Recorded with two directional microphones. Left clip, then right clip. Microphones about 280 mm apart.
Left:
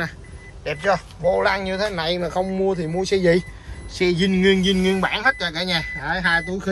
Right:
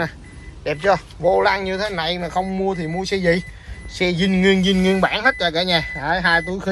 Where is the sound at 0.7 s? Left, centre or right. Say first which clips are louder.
Right 3 dB; centre.